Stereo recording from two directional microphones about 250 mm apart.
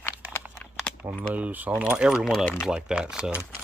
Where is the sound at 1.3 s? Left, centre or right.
Centre.